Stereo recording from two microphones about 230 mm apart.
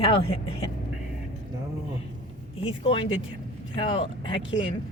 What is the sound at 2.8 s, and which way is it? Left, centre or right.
Speech, left.